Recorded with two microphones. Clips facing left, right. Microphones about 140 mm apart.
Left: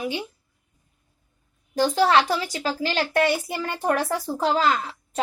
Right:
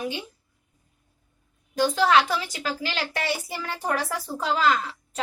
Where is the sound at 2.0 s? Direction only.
35° left (ahead or behind).